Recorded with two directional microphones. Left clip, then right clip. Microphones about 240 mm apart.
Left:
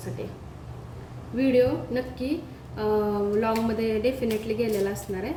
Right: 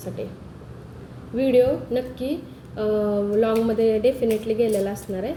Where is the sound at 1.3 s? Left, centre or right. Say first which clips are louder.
Right 4 dB; centre.